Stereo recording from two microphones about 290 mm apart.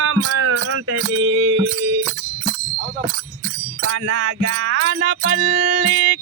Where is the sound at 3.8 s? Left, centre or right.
Right.